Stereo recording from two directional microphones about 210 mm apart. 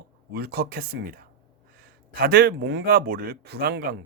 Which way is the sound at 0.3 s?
45° right (ahead or behind).